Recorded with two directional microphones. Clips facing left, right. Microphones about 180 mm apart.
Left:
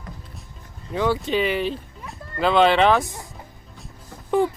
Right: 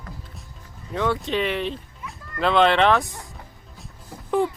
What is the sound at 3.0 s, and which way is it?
Speech, 20° left (ahead or behind).